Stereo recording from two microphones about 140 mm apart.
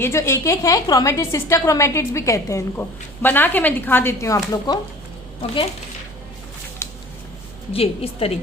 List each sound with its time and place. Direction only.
0.0 s a woman's voice: 20° left (ahead or behind)
6.8 s a sound: 20° left (ahead or behind)
7.7 s a woman's voice: 45° left (ahead or behind)